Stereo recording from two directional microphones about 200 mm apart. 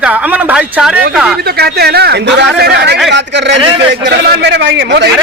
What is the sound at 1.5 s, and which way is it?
A man's voice, 55° right (ahead or behind).